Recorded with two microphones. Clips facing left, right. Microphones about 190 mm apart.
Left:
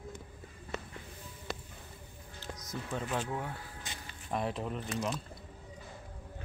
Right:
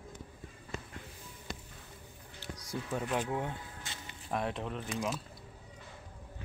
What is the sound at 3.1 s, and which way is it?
Speech, 20° right (ahead or behind).